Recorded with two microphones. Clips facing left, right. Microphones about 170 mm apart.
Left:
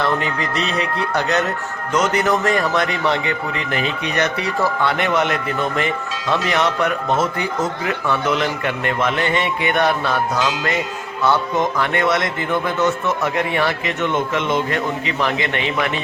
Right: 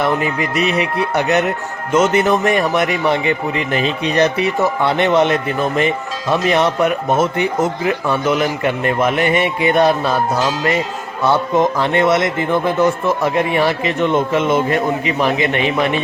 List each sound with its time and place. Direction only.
0.0 s speech: 20° right (ahead or behind)